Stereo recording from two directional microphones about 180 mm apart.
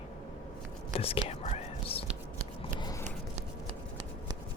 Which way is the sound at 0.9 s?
30° left (ahead or behind).